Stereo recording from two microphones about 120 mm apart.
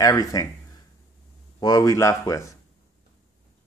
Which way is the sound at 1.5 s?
30° left (ahead or behind).